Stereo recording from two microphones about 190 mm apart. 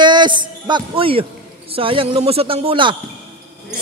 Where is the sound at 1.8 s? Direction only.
30° right (ahead or behind).